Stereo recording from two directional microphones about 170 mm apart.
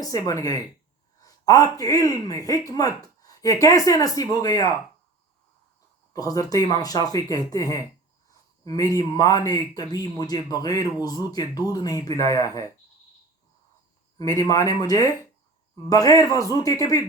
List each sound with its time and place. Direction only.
0.0 s a man's voice: 20° left (ahead or behind)
6.1 s a man's voice: 20° left (ahead or behind)
14.2 s a man's voice: 20° left (ahead or behind)